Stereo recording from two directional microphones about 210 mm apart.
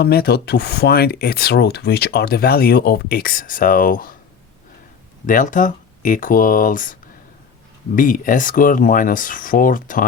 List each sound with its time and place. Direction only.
0.0 s speech: 50° left (ahead or behind)
5.2 s speech: 40° left (ahead or behind)
7.9 s speech: 40° left (ahead or behind)